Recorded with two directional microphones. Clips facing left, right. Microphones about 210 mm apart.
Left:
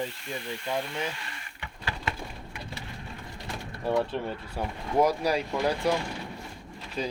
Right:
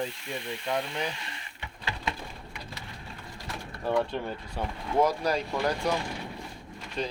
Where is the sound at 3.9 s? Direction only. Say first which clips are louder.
Left 1 dB; 5° left (ahead or behind).